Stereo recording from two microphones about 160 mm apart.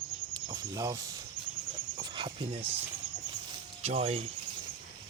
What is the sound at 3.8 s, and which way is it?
Speech, 40° right (ahead or behind).